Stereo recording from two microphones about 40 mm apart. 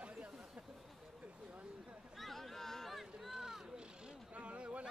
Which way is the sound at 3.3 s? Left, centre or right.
Centre.